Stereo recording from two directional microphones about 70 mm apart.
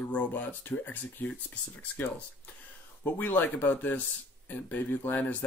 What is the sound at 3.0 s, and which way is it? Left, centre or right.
Speech, left.